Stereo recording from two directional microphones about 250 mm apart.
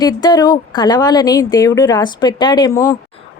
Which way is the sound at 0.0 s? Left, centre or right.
Centre.